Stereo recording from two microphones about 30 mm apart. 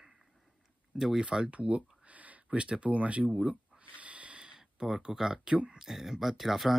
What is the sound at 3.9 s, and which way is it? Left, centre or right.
Snort, right.